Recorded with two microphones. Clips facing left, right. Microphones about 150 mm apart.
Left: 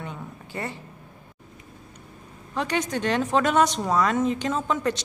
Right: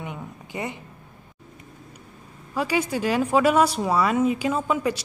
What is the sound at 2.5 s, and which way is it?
Speech, 5° right (ahead or behind).